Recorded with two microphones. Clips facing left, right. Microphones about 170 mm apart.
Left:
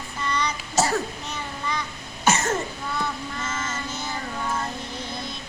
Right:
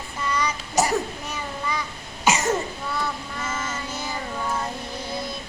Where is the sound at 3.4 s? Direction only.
10° right (ahead or behind).